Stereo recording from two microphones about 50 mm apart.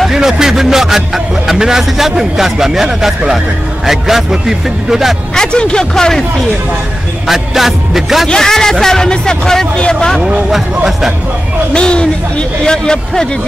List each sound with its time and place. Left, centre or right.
0.0 s speech: centre
5.3 s speech: centre
7.2 s speech: centre
8.3 s speech: centre
10.9 s speech: centre
11.7 s speech: centre